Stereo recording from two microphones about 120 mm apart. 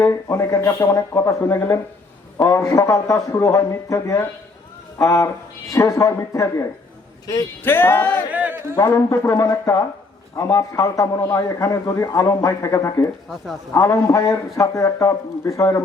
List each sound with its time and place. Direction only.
0.0 s speech: 25° left (ahead or behind)
7.6 s music: 20° left (ahead or behind)
8.3 s speech: 10° right (ahead or behind)
8.7 s speech: 30° left (ahead or behind)